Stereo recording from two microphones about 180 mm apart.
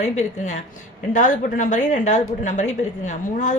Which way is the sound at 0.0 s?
40° left (ahead or behind).